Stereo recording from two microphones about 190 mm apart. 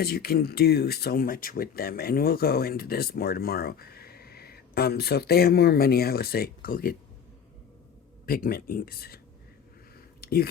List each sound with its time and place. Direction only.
0.0 s speech: 55° left (ahead or behind)
8.3 s speech: 50° left (ahead or behind)
10.2 s a sound: 55° left (ahead or behind)